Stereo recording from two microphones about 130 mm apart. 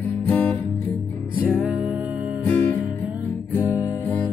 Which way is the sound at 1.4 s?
10° right (ahead or behind).